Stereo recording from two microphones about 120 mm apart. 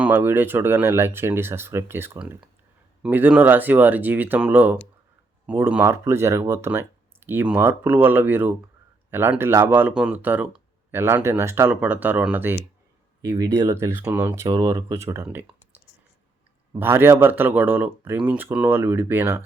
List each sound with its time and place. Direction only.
0.0 s speech: 15° right (ahead or behind)
13.2 s speech: 35° right (ahead or behind)
14.9 s speech: 20° right (ahead or behind)
16.7 s speech: 15° right (ahead or behind)